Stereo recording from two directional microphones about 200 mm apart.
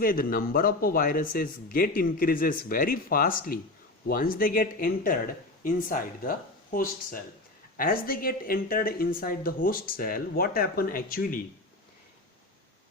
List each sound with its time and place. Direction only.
0.0 s speech: 45° left (ahead or behind)